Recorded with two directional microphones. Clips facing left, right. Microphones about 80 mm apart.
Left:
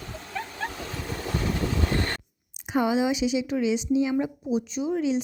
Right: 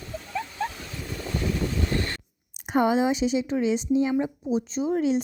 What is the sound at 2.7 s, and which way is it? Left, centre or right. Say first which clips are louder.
A woman's voice: right 2 dB; right.